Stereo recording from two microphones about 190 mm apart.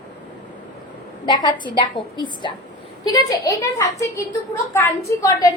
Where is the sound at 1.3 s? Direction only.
20° left (ahead or behind).